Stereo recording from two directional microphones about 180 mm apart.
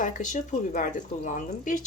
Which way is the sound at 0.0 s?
45° left (ahead or behind).